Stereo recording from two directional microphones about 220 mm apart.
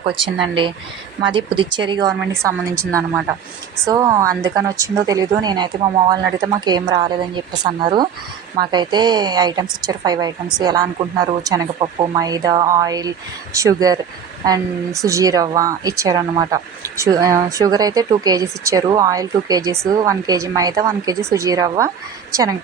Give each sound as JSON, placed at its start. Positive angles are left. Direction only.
{"t": 1.2, "sound": "speech", "side_deg": -25}
{"t": 3.8, "sound": "speech", "side_deg": -15}